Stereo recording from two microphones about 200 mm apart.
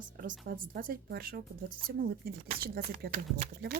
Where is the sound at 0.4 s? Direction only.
45° right (ahead or behind).